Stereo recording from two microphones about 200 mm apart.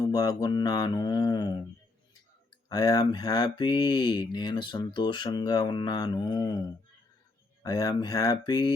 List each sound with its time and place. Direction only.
0.0 s speech: 20° left (ahead or behind)
2.6 s speech: 20° left (ahead or behind)
7.6 s speech: 20° left (ahead or behind)